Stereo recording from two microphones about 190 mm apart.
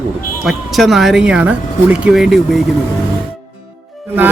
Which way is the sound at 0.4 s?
Centre (ahead or behind).